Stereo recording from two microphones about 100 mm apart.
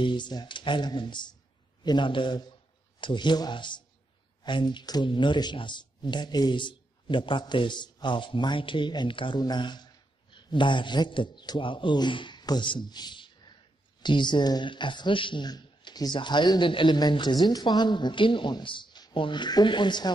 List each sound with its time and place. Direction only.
0.0 s speech: 50° left (ahead or behind)